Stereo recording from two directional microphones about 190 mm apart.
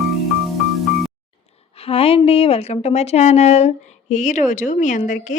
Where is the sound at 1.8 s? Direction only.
30° left (ahead or behind).